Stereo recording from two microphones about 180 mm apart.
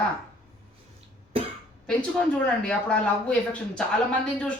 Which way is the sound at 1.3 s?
30° right (ahead or behind).